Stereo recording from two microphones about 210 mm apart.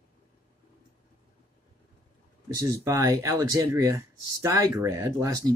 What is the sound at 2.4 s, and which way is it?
Speech, 15° right (ahead or behind).